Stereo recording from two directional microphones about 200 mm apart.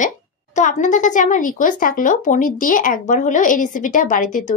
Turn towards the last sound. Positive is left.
turn(degrees=40)  # may be behind; listen again after turning